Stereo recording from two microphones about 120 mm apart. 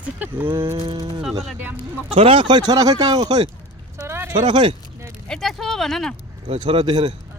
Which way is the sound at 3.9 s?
20° right (ahead or behind).